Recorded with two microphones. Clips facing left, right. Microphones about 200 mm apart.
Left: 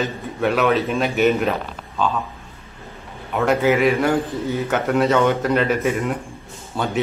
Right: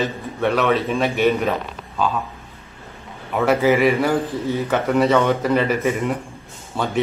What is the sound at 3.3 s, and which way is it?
A man's voice, centre (ahead or behind).